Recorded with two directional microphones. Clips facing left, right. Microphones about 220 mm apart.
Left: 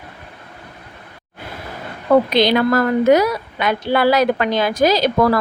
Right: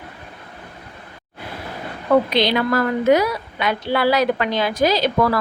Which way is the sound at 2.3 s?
45° left (ahead or behind).